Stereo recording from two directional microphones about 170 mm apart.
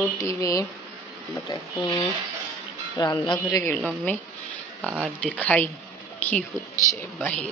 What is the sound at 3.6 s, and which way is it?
Speech, 10° left (ahead or behind).